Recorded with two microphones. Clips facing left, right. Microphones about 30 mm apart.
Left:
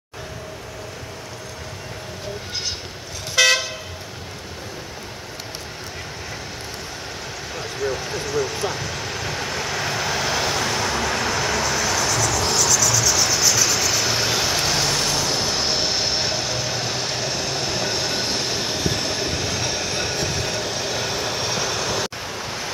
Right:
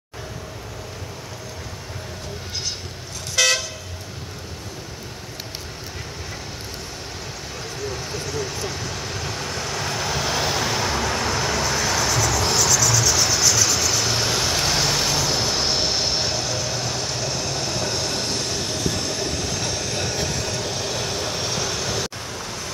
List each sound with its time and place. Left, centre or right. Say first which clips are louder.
3.3 s toot: left 3 dB; centre
7.5 s vehicle: left 5 dB; centre